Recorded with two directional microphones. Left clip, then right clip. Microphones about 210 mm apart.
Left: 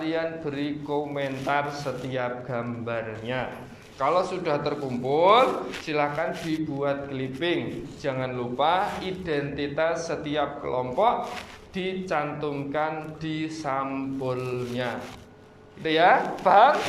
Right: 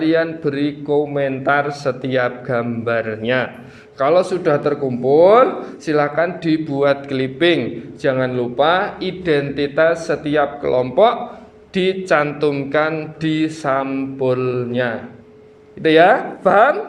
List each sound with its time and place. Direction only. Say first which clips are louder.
0.0 s speech: right 11 dB; 40° right (ahead or behind)